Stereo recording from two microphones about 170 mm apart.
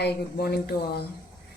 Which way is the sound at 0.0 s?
70° left (ahead or behind).